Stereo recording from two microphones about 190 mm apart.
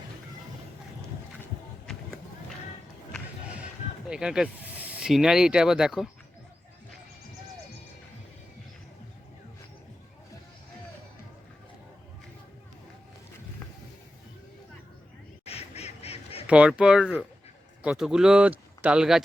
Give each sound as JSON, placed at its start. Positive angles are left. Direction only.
{"t": 4.1, "sound": "speech", "side_deg": -5}
{"t": 15.4, "sound": "duck", "side_deg": 35}
{"t": 16.5, "sound": "speech", "side_deg": -5}